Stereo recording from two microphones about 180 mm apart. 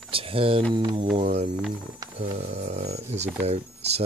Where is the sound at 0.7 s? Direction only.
25° right (ahead or behind).